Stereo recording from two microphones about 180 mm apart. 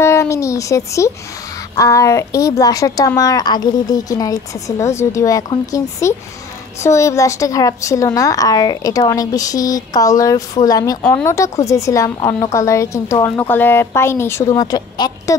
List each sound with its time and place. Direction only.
0.0 s a child's voice: 15° left (ahead or behind)